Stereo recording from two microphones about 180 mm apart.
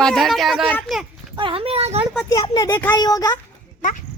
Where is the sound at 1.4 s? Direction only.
30° right (ahead or behind).